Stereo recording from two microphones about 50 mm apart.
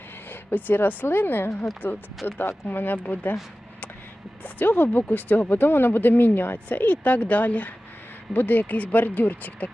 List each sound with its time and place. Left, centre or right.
0.3 s a woman's voice: left
4.4 s speech: left